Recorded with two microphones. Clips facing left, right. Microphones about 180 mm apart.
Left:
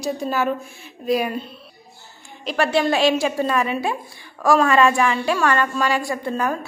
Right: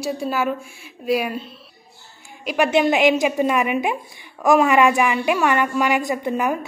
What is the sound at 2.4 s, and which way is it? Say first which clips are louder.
A woman's voice: right 2 dB; 15° right (ahead or behind).